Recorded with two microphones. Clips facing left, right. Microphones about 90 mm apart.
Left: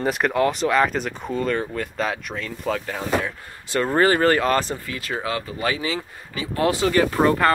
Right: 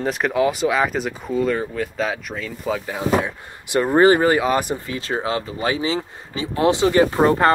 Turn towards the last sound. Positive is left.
turn(degrees=-25)  # may be behind; listen again after turning